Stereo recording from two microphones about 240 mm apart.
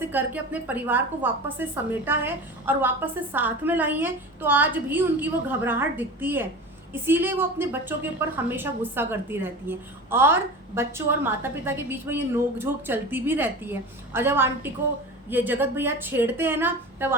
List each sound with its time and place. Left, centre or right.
0.0 s a woman's voice: centre